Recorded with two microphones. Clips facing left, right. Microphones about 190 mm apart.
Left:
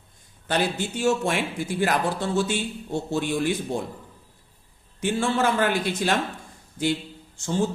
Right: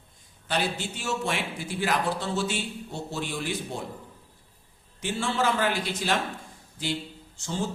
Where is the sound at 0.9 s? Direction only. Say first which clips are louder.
Left 10 dB; 50° left (ahead or behind).